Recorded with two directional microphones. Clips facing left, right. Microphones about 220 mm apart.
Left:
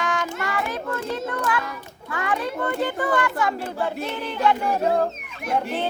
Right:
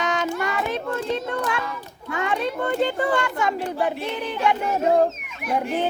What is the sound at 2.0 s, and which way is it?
Speech, 25° right (ahead or behind).